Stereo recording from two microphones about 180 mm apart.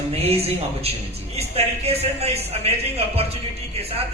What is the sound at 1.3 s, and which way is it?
Speech, 35° right (ahead or behind).